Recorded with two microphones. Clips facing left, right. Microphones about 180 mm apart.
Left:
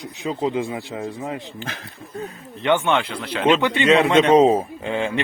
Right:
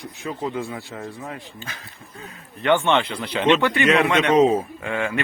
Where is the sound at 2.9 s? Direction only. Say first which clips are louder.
Right 1 dB; 5° left (ahead or behind).